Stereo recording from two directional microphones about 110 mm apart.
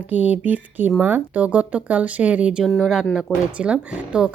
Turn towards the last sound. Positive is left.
turn(degrees=-10)  # may be behind; listen again after turning